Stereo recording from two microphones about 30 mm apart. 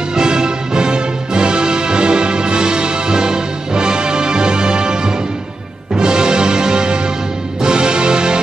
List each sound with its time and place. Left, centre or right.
0.1 s music: right